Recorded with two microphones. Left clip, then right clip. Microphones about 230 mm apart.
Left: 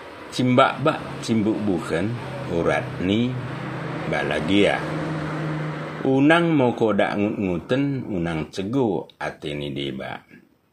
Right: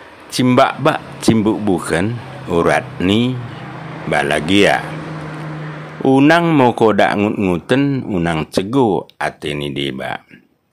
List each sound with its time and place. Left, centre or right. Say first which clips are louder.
0.3 s speech: right 5 dB; right
6.0 s speech: right 6 dB; right